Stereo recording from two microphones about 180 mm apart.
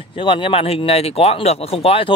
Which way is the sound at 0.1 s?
30° left (ahead or behind).